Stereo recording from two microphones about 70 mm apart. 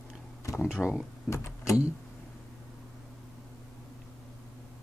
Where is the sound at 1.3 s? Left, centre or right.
Left.